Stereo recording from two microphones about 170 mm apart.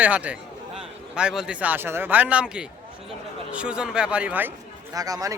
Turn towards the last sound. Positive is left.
turn(degrees=-20)  # may be behind; listen again after turning